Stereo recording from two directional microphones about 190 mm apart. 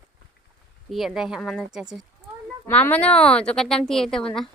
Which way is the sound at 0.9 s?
Centre (ahead or behind).